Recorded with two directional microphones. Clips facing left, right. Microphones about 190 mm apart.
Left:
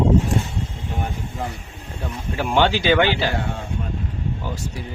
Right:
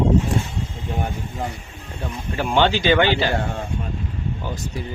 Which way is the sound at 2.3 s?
5° left (ahead or behind).